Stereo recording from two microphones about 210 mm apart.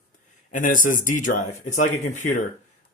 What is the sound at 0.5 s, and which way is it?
Speech, 40° left (ahead or behind).